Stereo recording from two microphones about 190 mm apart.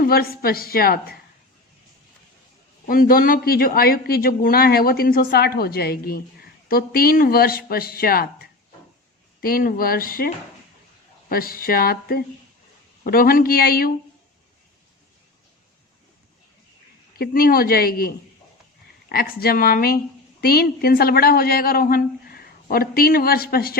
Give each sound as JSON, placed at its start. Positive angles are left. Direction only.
{"t": 0.0, "sound": "a man's voice", "side_deg": 50}
{"t": 2.8, "sound": "a man's voice", "side_deg": 50}
{"t": 9.4, "sound": "a man's voice", "side_deg": 50}
{"t": 17.2, "sound": "a man's voice", "side_deg": 50}